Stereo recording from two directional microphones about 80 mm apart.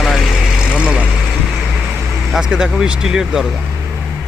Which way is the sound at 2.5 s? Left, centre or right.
Centre.